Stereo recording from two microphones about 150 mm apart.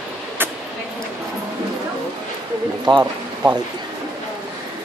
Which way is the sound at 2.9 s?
30° right (ahead or behind).